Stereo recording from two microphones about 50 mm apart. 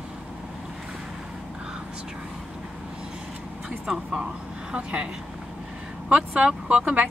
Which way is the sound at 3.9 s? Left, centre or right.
Centre.